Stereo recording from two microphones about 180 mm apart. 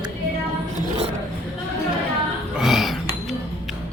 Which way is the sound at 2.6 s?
Centre (ahead or behind).